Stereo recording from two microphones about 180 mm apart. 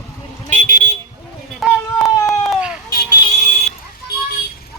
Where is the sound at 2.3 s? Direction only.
5° right (ahead or behind).